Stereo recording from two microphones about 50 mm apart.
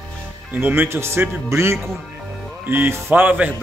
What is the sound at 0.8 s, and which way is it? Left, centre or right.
Speech, right.